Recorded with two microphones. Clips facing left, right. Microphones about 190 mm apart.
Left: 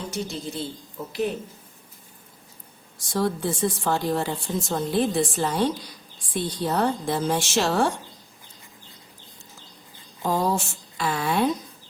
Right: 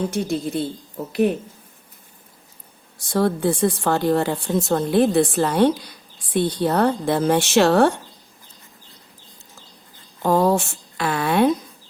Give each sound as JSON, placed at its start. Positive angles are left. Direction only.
{"t": 0.1, "sound": "speech", "side_deg": -55}
{"t": 3.1, "sound": "speech", "side_deg": -60}
{"t": 10.2, "sound": "speech", "side_deg": -60}